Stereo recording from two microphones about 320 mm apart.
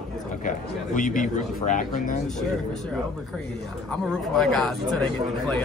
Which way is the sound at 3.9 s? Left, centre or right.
Centre.